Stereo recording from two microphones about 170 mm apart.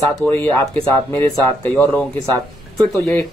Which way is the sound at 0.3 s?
15° left (ahead or behind).